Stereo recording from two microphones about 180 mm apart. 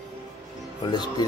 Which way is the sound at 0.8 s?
25° left (ahead or behind).